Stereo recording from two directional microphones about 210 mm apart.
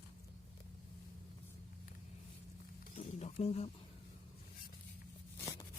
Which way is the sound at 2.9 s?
30° left (ahead or behind).